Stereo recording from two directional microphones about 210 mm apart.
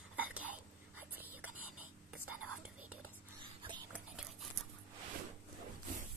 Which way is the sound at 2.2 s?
90° right.